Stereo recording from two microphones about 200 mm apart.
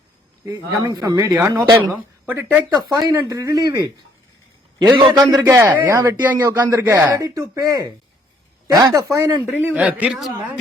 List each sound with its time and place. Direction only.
0.4 s a man's voice: 15° right (ahead or behind)
4.9 s a man's voice: 20° right (ahead or behind); by 10.3 s 5° right (ahead or behind)